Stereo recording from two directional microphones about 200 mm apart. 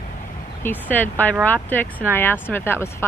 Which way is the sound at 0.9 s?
10° left (ahead or behind).